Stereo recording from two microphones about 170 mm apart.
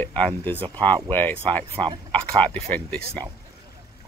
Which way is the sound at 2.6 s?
10° left (ahead or behind).